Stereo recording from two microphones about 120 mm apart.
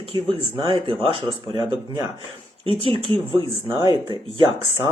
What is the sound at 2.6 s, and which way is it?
Speech, 50° right (ahead or behind).